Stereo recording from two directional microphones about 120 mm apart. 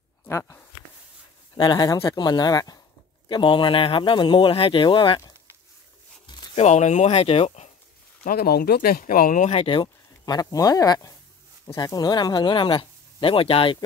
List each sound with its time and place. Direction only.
0.3 s speech: 25° left (ahead or behind)
1.6 s speech: 35° left (ahead or behind)
3.3 s speech: 40° left (ahead or behind)
6.5 s speech: 70° left (ahead or behind); by 7.6 s 55° left (ahead or behind)
9.0 s speech: 90° left
9.7 s speech: 40° left (ahead or behind)